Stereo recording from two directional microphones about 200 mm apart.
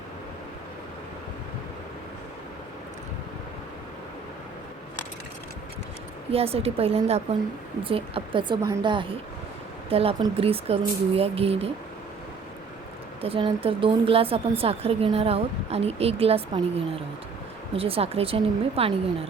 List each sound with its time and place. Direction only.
6.3 s a woman's voice: 30° right (ahead or behind)
13.2 s a woman's voice: 25° right (ahead or behind)